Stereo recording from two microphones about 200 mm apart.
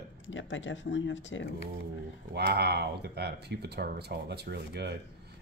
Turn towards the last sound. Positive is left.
turn(degrees=-55)  # may be behind; listen again after turning